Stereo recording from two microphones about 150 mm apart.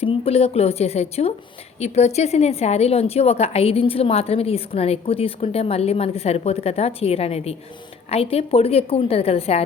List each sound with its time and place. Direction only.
0.0 s a woman's voice: 40° left (ahead or behind)